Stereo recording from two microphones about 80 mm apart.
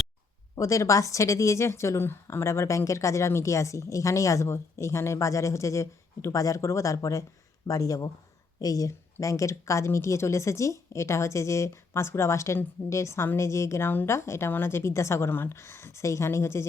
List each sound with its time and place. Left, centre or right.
0.5 s speech: left